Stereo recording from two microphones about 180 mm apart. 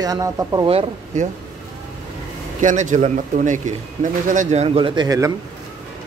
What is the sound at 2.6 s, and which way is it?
Speech, 45° right (ahead or behind).